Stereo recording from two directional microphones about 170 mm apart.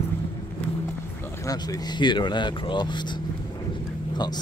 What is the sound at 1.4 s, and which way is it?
Speech, 20° left (ahead or behind).